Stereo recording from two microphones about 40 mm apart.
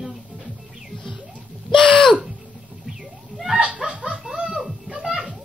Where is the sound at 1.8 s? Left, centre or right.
Left.